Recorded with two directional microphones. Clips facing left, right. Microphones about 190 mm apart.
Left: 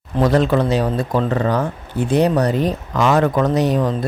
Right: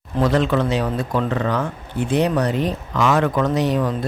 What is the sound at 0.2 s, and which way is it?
Speech, 40° left (ahead or behind).